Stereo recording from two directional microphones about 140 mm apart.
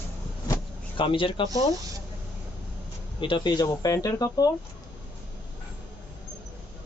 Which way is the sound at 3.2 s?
35° left (ahead or behind).